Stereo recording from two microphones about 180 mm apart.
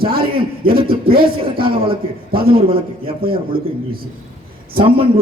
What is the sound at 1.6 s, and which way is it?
A man's voice, 30° right (ahead or behind).